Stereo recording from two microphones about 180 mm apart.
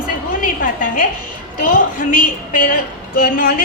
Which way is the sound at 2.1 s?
50° left (ahead or behind).